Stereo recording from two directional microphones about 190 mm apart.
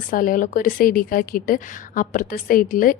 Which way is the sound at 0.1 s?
45° left (ahead or behind).